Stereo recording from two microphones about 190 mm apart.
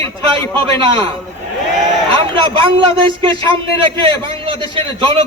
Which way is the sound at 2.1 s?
30° right (ahead or behind).